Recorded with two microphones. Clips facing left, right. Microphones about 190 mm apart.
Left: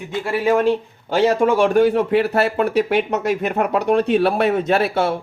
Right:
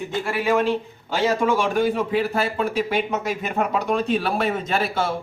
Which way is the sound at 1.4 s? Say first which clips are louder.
Left 6 dB; 60° left (ahead or behind).